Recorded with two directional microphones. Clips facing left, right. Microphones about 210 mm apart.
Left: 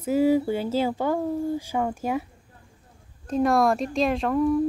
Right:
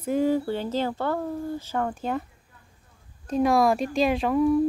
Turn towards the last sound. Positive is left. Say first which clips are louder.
# right 1 dB
turn(degrees=-5)  # may be behind; listen again after turning